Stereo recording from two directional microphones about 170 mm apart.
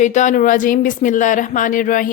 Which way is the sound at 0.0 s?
45° left (ahead or behind).